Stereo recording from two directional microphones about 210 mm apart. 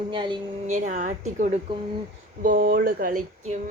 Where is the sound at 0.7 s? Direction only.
35° right (ahead or behind).